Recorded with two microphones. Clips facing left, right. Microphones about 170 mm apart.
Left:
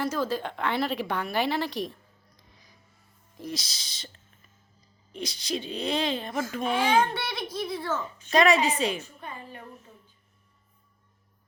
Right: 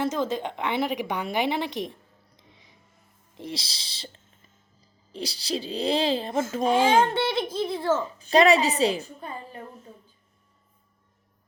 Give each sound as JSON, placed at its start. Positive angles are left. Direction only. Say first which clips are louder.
{"t": 0.0, "sound": "a woman's voice", "louder": "right 2 dB", "side_deg": -20}
{"t": 6.6, "sound": "a woman's voice", "louder": "right 4 dB", "side_deg": -40}
{"t": 7.0, "sound": "a woman's voice", "louder": "right 6 dB", "side_deg": -25}